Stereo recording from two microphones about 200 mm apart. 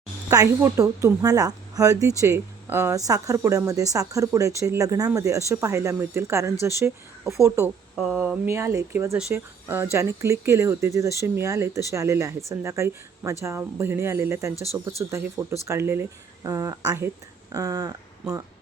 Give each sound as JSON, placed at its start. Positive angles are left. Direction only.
{"t": 0.3, "sound": "speech", "side_deg": -15}